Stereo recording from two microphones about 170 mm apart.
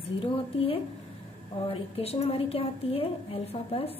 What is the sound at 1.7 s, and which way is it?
A woman's voice, 35° left (ahead or behind).